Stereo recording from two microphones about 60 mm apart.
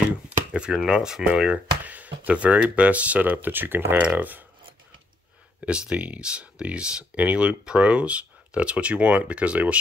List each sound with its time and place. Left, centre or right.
0.0 s a sound: centre
0.8 s speech: centre; by 4.5 s right
5.7 s speech: centre